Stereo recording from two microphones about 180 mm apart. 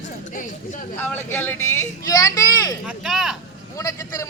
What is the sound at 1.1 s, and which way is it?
Speech, 10° left (ahead or behind).